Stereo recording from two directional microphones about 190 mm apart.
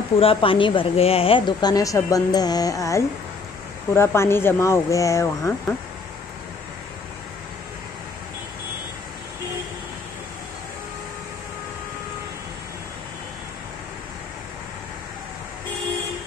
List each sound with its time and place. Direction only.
0.2 s a woman's voice: 30° left (ahead or behind)